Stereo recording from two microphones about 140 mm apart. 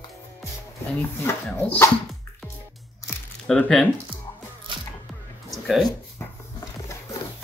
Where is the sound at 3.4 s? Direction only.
5° left (ahead or behind).